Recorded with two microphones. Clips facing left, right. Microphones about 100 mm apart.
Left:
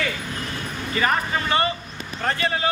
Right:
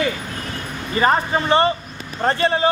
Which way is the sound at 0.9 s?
30° right (ahead or behind).